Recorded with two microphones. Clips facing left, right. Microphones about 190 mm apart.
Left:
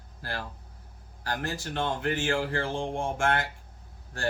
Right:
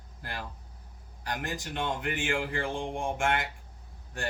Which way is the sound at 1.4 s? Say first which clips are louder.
Left 3 dB; 15° right (ahead or behind).